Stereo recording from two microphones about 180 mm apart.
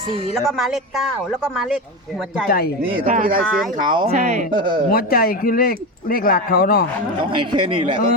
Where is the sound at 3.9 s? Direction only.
25° right (ahead or behind).